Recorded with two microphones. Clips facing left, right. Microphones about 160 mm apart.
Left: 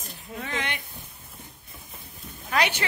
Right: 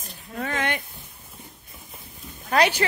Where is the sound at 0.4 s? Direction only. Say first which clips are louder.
Right 5 dB; 50° right (ahead or behind).